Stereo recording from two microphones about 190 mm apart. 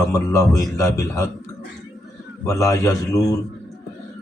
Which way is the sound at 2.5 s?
15° left (ahead or behind).